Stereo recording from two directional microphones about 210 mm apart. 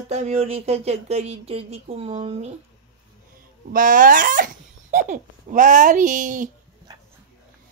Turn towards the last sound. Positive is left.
turn(degrees=-40)  # may be behind; listen again after turning